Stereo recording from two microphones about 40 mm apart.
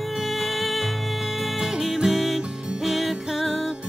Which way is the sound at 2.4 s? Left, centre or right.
Centre.